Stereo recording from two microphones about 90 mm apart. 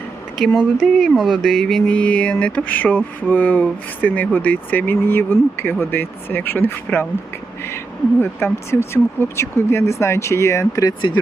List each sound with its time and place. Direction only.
0.3 s speech: 5° left (ahead or behind); by 7.1 s 20° left (ahead or behind)
8.7 s speech: 30° left (ahead or behind)